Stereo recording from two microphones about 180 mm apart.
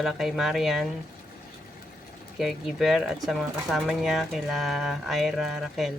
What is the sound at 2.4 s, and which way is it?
Speech, centre (ahead or behind).